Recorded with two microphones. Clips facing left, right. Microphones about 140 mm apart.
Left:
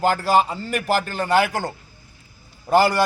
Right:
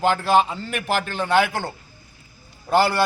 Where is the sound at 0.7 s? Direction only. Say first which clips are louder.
Left 3 dB; 40° left (ahead or behind).